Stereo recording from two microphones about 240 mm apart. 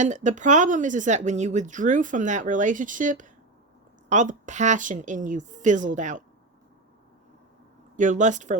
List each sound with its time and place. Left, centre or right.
0.0 s speech: right
7.9 s speech: right